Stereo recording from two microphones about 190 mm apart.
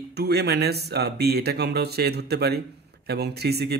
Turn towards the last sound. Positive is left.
turn(degrees=-60)  # may be behind; listen again after turning